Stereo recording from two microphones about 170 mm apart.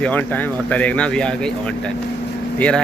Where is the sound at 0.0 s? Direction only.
10° left (ahead or behind).